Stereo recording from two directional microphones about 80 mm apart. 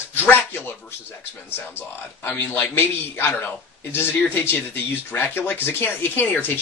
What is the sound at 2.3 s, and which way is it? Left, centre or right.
Speech, left.